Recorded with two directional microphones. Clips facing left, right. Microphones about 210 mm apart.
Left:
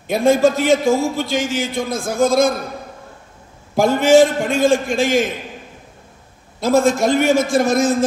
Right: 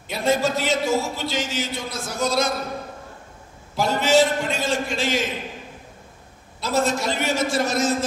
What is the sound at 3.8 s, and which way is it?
A man's voice, 50° left (ahead or behind).